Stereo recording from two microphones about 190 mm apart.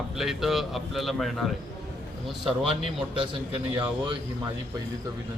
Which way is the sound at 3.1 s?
25° right (ahead or behind).